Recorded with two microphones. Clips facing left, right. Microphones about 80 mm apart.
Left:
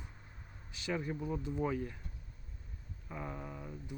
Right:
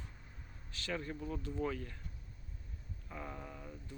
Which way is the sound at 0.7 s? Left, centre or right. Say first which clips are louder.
Left 3 dB; centre.